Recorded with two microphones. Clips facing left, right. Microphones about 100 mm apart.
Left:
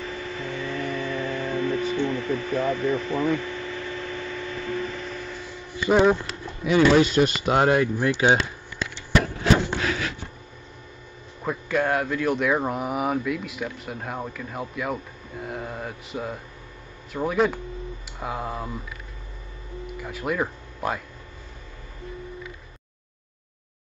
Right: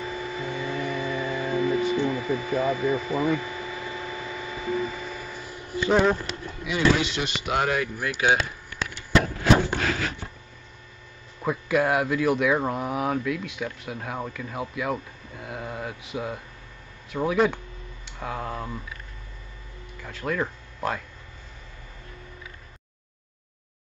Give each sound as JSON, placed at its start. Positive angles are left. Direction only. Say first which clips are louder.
{"t": 0.0, "sound": "music", "louder": "right 1 dB", "side_deg": -15}
{"t": 5.8, "sound": "speech", "louder": "left 2 dB", "side_deg": 5}
{"t": 6.6, "sound": "speech", "louder": "left 6 dB", "side_deg": 45}
{"t": 11.4, "sound": "speech", "louder": "right 1 dB", "side_deg": -5}
{"t": 18.0, "sound": "a sound", "louder": "even", "side_deg": 5}
{"t": 20.0, "sound": "speech", "louder": "left 1 dB", "side_deg": 10}